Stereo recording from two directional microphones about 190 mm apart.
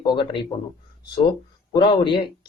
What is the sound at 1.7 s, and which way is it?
Speech, 25° left (ahead or behind).